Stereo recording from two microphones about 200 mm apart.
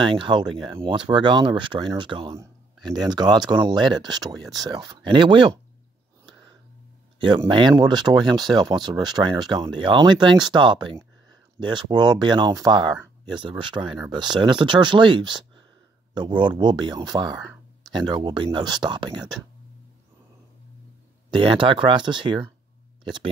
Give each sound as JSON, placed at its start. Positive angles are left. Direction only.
{"t": 0.0, "sound": "speech", "side_deg": -25}
{"t": 7.2, "sound": "speech", "side_deg": -25}
{"t": 21.3, "sound": "speech", "side_deg": -25}